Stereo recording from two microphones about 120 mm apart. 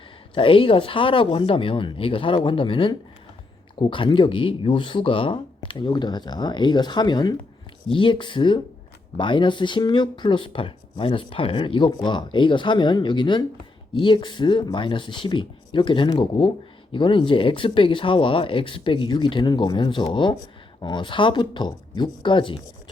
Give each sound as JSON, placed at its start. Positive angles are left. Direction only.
{"t": 0.3, "sound": "speech", "side_deg": 45}